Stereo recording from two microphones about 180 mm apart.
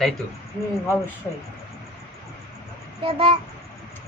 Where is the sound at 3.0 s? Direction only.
35° right (ahead or behind).